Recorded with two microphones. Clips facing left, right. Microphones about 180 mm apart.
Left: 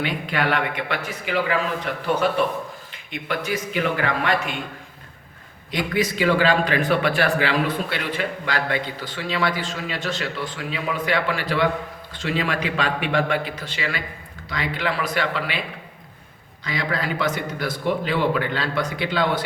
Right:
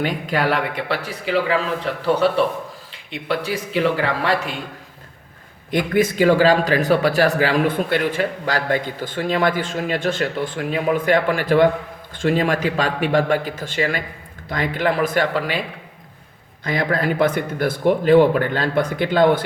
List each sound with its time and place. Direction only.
0.0 s a man's voice: 40° right (ahead or behind)
5.7 s a man's voice: 50° right (ahead or behind)
16.6 s a man's voice: 50° right (ahead or behind)